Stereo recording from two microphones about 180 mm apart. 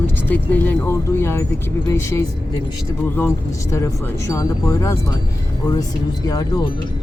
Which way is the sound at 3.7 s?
15° left (ahead or behind).